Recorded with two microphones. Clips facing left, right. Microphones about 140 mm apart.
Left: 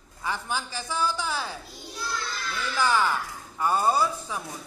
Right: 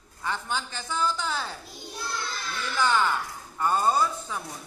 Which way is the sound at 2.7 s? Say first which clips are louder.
Even; 5° left (ahead or behind).